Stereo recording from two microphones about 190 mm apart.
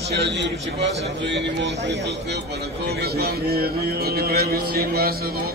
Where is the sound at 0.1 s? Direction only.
65° right (ahead or behind).